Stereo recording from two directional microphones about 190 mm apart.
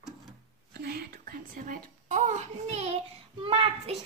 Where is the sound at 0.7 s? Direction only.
55° right (ahead or behind); by 3.0 s 35° right (ahead or behind).